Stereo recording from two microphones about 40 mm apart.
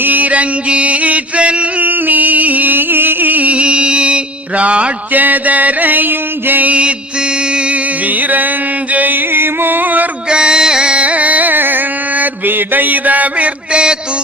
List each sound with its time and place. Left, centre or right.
0.0 s music: right
1.8 s music: right
3.5 s mantra: right
5.1 s mantra: right
6.7 s mantra: right
8.0 s music: right
10.2 s music: right
10.9 s carnatic music: right
11.5 s mantra: right